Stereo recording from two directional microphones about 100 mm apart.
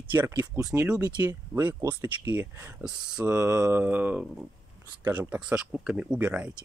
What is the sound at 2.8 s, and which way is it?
Speech, 10° right (ahead or behind).